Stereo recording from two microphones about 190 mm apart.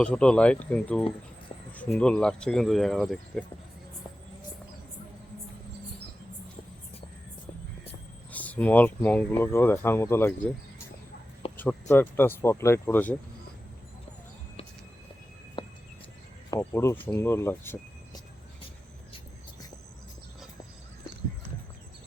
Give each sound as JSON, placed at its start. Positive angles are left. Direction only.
{"t": 0.0, "sound": "speech", "side_deg": 5}
{"t": 8.3, "sound": "speech", "side_deg": 10}
{"t": 11.5, "sound": "speech", "side_deg": 10}
{"t": 15.6, "sound": "a sound", "side_deg": 25}
{"t": 16.5, "sound": "speech", "side_deg": 15}